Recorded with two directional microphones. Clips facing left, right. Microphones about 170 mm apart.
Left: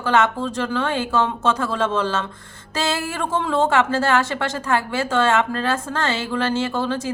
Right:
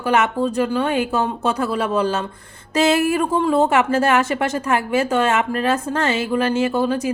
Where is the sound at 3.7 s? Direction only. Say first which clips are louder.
Right 2 dB; 20° right (ahead or behind).